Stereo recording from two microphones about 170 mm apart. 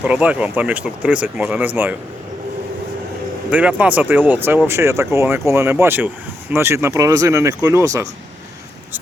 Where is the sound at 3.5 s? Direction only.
10° right (ahead or behind).